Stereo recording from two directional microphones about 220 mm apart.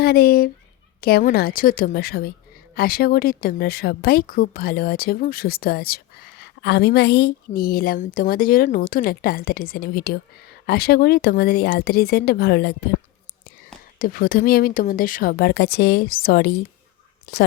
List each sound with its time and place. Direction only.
0.0 s a woman's voice: 45° left (ahead or behind)
14.0 s a woman's voice: 40° left (ahead or behind)